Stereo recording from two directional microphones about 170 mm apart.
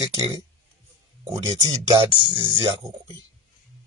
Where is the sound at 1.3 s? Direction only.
25° right (ahead or behind).